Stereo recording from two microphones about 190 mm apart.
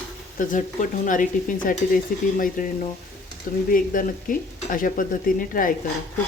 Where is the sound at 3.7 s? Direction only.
45° left (ahead or behind).